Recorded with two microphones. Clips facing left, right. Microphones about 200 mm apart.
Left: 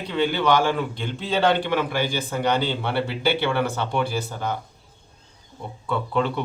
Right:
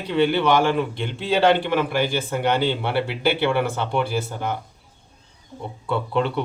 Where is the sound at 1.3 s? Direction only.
10° right (ahead or behind).